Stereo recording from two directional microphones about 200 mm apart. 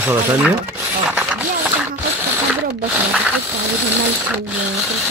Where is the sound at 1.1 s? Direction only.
5° right (ahead or behind).